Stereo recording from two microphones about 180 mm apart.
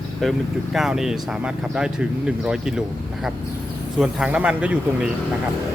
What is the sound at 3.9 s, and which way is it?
Speech, 5° right (ahead or behind).